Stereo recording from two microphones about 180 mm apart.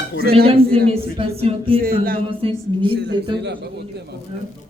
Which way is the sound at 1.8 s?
55° right (ahead or behind).